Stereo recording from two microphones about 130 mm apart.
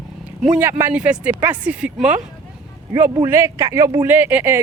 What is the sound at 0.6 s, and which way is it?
Speech, 15° right (ahead or behind).